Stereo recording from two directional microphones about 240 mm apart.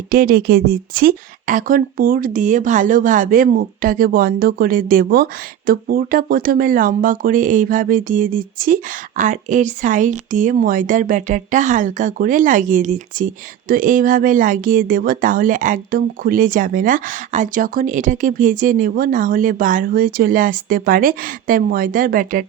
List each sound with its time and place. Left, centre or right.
0.1 s speech: right